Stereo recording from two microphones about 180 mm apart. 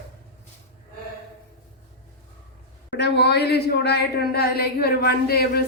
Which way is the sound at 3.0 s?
65° left (ahead or behind).